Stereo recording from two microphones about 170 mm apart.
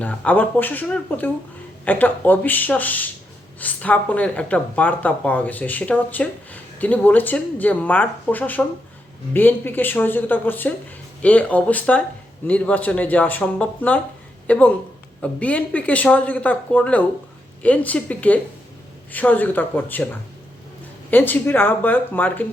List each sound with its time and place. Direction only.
0.0 s a woman's voice: 10° left (ahead or behind)
21.1 s speech: 10° left (ahead or behind)